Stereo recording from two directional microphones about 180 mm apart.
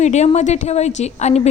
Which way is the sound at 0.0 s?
40° left (ahead or behind).